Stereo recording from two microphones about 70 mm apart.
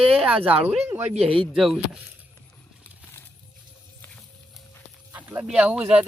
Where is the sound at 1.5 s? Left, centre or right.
Centre.